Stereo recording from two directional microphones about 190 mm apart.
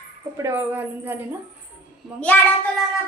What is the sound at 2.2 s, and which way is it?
Child singing, 10° left (ahead or behind).